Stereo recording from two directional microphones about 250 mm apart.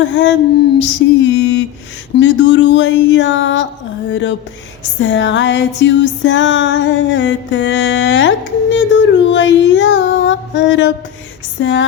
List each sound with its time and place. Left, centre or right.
0.0 s music: left
0.8 s mantra: left
2.1 s music: left
8.7 s a sound: left
11.6 s music: left